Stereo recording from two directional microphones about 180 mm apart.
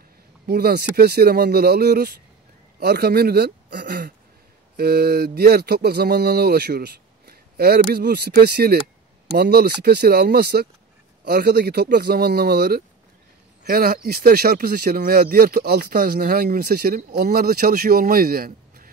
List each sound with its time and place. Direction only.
0.5 s speech: 60° right (ahead or behind)